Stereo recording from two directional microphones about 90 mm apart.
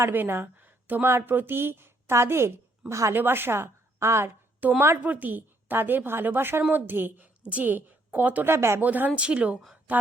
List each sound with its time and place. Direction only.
0.0 s a woman's voice: 25° right (ahead or behind)
4.6 s a woman's voice: 20° right (ahead or behind)
8.8 s speech: 20° right (ahead or behind)